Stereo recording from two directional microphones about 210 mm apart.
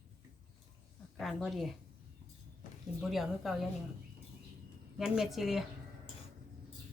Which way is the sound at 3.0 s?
Centre (ahead or behind).